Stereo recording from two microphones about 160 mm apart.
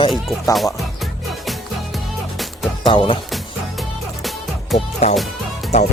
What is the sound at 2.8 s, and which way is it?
Speech, 30° left (ahead or behind).